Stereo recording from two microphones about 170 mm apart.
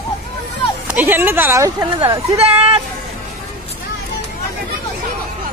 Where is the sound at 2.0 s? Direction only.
35° right (ahead or behind).